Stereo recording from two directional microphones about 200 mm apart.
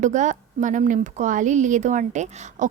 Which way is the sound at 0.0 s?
35° right (ahead or behind).